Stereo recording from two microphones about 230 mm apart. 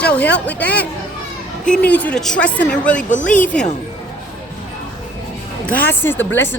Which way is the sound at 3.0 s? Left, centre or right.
Left.